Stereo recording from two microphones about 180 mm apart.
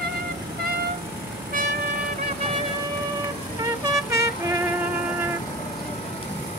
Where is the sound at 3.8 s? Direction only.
15° right (ahead or behind).